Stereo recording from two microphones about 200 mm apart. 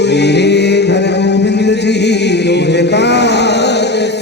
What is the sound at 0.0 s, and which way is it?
Chant, 60° left (ahead or behind).